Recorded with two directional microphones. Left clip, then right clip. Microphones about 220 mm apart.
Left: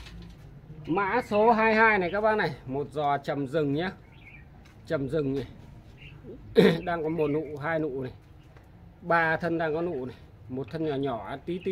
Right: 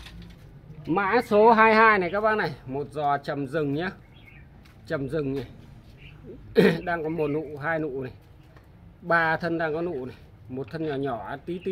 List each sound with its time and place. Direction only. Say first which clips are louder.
0.8 s speech: right 4 dB; 50° right (ahead or behind)
1.5 s a man's voice: right 3 dB; 30° right (ahead or behind); by 5.3 s centre (ahead or behind)
6.5 s a man's voice: right 1 dB; centre (ahead or behind)